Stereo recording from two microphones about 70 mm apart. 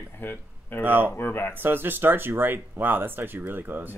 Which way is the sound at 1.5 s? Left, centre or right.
Right.